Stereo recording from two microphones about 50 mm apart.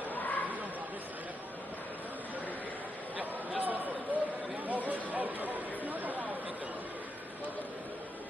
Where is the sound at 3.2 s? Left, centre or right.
Right.